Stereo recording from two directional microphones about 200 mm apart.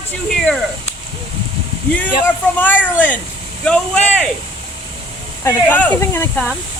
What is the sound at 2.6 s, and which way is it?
Speech, 10° left (ahead or behind).